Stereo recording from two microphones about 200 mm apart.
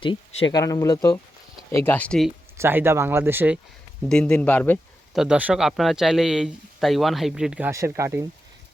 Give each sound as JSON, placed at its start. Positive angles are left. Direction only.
{"t": 0.0, "sound": "speech", "side_deg": 25}
{"t": 2.6, "sound": "speech", "side_deg": -10}
{"t": 4.1, "sound": "speech", "side_deg": 5}
{"t": 5.1, "sound": "speech", "side_deg": -5}